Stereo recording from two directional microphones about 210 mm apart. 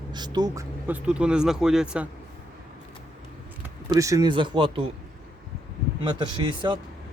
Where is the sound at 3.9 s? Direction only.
15° right (ahead or behind).